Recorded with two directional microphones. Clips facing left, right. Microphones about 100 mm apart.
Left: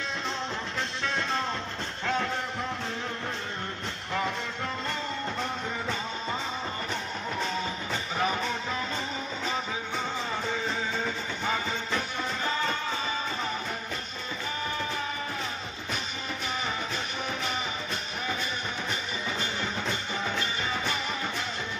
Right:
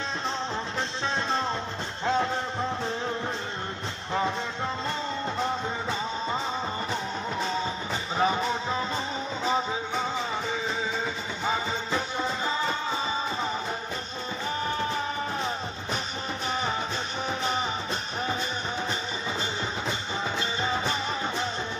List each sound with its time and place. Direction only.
1.0 s music: 25° right (ahead or behind)
7.4 s music: 25° right (ahead or behind)
11.4 s music: 20° right (ahead or behind)
19.9 s music: 25° right (ahead or behind)